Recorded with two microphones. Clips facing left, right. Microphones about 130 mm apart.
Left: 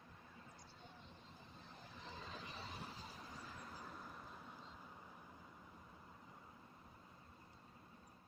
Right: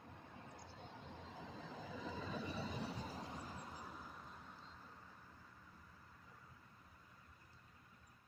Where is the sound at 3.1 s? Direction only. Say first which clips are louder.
Right 6 dB; 90° right.